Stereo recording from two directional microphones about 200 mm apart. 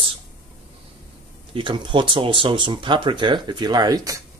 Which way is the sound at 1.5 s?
25° right (ahead or behind).